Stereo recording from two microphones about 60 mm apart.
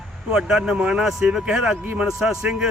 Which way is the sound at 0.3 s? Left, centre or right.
Centre.